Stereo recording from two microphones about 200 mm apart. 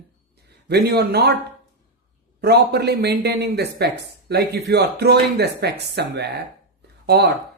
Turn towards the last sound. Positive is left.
turn(degrees=-55)  # may be behind; listen again after turning